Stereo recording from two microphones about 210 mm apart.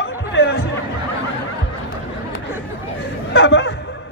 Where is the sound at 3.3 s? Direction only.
60° left (ahead or behind).